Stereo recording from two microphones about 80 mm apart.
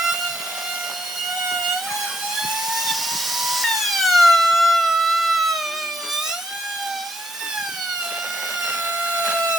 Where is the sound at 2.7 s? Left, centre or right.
Centre.